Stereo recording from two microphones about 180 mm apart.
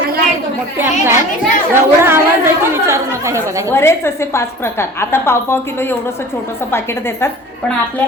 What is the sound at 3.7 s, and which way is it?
A woman's voice, 15° left (ahead or behind).